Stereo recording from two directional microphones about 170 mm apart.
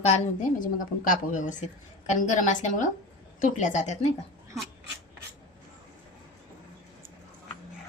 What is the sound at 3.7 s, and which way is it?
Speech, 40° left (ahead or behind).